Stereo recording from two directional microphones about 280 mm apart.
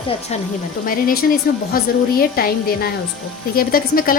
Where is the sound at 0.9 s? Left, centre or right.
Left.